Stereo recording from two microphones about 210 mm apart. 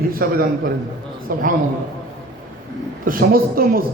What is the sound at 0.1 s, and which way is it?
A man's voice, 45° right (ahead or behind).